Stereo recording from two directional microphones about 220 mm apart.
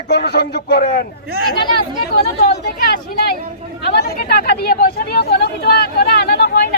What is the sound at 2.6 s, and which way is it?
A man's voice, 45° left (ahead or behind).